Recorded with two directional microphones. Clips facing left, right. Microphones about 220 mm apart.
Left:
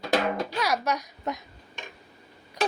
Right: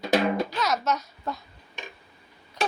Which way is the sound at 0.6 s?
10° left (ahead or behind).